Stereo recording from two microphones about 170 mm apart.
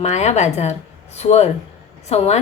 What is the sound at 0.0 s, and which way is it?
A woman's voice, 40° left (ahead or behind).